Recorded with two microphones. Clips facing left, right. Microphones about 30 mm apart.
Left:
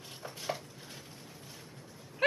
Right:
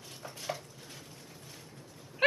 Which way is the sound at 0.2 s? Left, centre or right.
Centre.